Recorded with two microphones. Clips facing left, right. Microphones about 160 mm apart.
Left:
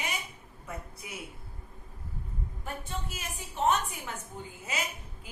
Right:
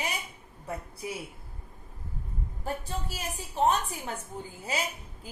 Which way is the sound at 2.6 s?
35° right (ahead or behind).